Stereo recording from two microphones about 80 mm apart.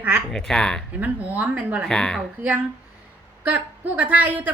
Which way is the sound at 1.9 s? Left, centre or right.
Centre.